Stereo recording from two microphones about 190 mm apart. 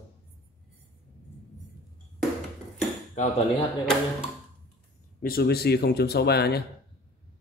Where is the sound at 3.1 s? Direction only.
35° left (ahead or behind).